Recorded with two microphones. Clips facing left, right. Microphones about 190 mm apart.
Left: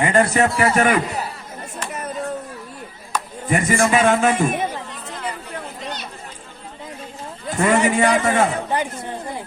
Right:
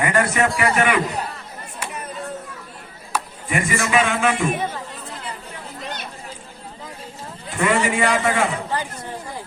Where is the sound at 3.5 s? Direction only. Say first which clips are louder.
Left 5 dB; 40° left (ahead or behind).